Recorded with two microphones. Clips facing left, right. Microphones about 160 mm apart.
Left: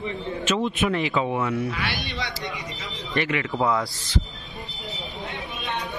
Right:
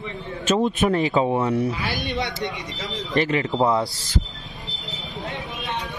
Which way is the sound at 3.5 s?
25° right (ahead or behind).